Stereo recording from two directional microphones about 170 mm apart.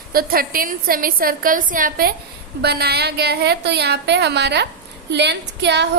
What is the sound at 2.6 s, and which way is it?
A woman's voice, 70° right (ahead or behind).